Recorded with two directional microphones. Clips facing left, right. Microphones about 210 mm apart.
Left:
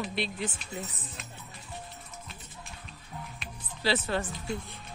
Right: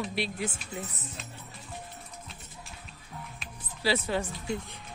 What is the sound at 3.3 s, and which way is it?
Music, 10° right (ahead or behind).